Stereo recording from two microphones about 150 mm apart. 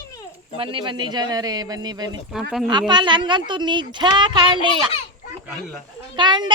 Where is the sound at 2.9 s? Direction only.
30° right (ahead or behind).